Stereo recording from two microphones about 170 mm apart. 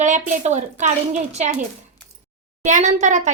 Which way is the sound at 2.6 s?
45° right (ahead or behind).